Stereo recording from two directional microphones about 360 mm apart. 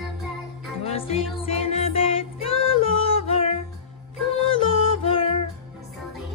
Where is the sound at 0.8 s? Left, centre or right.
Centre.